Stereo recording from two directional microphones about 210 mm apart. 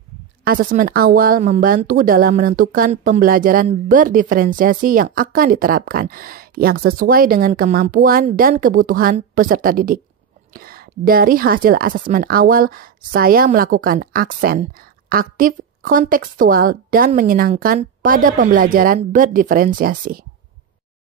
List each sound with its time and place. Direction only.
0.4 s speech: 45° right (ahead or behind)